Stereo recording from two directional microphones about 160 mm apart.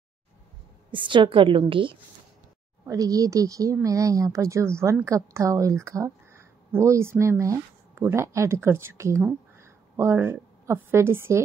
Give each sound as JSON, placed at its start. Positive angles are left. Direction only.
{"t": 0.9, "sound": "a woman's voice", "side_deg": -30}
{"t": 2.8, "sound": "a woman's voice", "side_deg": -20}